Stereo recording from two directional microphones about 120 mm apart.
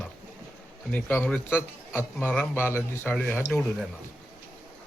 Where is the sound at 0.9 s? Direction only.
15° left (ahead or behind).